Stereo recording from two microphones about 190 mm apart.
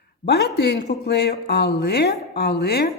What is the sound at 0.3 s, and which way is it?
Speech, 60° left (ahead or behind).